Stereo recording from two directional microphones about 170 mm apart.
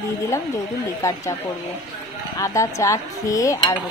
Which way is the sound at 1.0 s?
15° left (ahead or behind).